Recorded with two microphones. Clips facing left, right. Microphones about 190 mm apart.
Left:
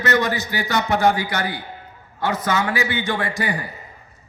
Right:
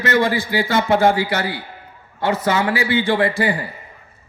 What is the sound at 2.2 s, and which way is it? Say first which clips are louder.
Speech: right 3 dB; 30° right (ahead or behind).